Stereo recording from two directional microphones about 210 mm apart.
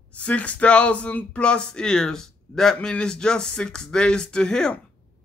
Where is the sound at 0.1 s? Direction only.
5° left (ahead or behind).